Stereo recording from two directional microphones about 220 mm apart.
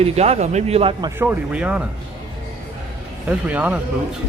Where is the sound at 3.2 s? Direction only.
5° right (ahead or behind).